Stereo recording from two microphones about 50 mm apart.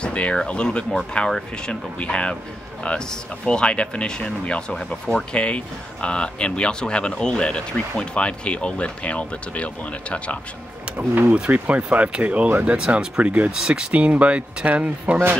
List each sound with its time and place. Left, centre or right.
0.0 s a sound: left
0.5 s speech: centre
11.0 s speech: right
11.5 s speech: right; by 13.2 s centre
13.2 s speech: right